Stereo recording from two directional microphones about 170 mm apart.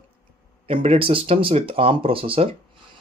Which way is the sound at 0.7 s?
30° right (ahead or behind).